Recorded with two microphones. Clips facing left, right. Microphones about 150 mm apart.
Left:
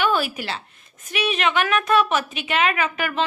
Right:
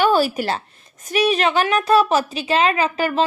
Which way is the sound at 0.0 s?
35° right (ahead or behind).